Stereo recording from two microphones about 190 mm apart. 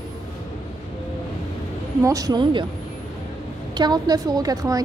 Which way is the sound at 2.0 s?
20° right (ahead or behind).